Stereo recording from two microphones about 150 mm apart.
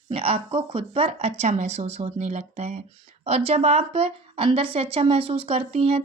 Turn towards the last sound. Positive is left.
turn(degrees=-40)  # may be behind; listen again after turning